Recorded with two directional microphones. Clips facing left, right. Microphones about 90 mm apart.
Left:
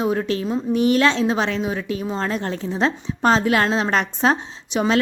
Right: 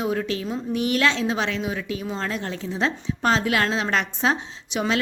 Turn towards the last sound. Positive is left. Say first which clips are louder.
# left 5 dB
turn(degrees=35)  # may be behind; listen again after turning